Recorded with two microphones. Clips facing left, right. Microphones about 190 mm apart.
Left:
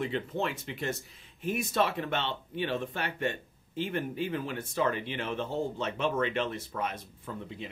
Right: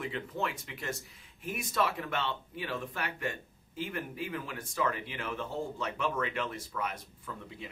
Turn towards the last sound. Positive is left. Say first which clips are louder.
# left 4 dB
turn(degrees=25)  # may be behind; listen again after turning